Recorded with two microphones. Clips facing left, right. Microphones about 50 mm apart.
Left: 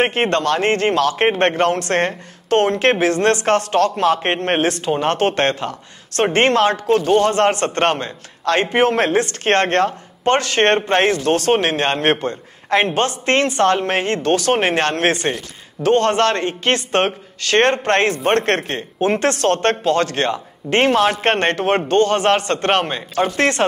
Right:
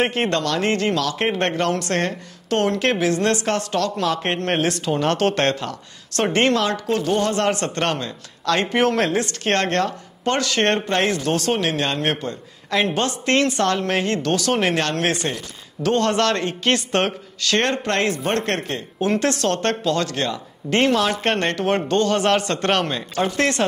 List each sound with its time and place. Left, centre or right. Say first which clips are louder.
0.0 s a man's voice: left 3 dB; left